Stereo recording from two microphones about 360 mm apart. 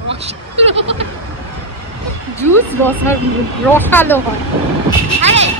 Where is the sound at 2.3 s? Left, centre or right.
Centre.